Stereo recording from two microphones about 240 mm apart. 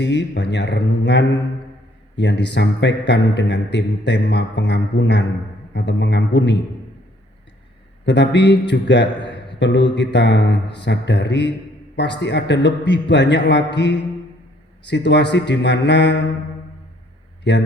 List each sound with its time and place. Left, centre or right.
0.0 s a man's voice: left
8.0 s a man's voice: left
17.5 s a man's voice: left